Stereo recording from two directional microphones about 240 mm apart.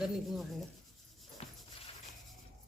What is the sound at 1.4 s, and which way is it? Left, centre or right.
Music, left.